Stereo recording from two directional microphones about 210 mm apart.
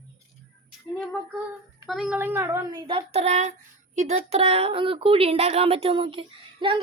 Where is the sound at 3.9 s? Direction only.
30° right (ahead or behind).